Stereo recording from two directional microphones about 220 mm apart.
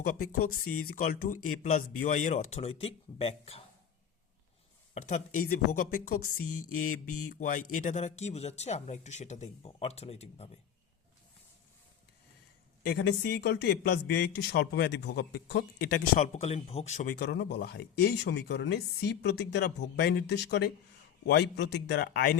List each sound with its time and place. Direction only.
0.0 s speech: 40° left (ahead or behind)
4.9 s speech: 35° left (ahead or behind)
6.4 s a sound: 85° left
6.7 s speech: 35° left (ahead or behind)
12.8 s speech: 50° left (ahead or behind)
16.1 s speech: 30° left (ahead or behind)
17.2 s speech: 50° left (ahead or behind)